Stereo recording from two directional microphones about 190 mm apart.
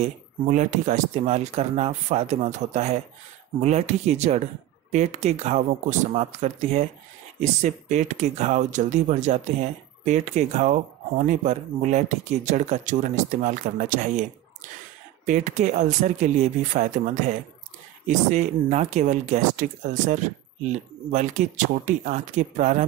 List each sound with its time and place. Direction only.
0.0 s speech: 40° right (ahead or behind)